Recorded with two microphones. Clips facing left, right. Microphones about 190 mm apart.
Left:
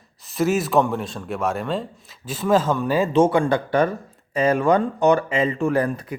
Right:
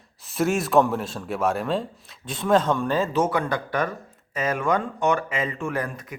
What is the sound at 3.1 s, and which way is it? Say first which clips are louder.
Speech: left 6 dB; 30° left (ahead or behind).